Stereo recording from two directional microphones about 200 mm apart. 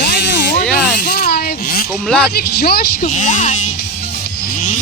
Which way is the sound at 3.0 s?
40° left (ahead or behind).